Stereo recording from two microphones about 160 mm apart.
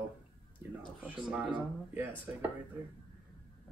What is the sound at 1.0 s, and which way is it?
Speech, 5° right (ahead or behind).